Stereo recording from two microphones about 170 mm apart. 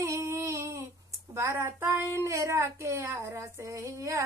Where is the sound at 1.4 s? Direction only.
15° right (ahead or behind).